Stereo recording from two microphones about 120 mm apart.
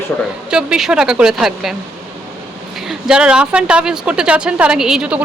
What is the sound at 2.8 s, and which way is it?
A woman's voice, 5° right (ahead or behind).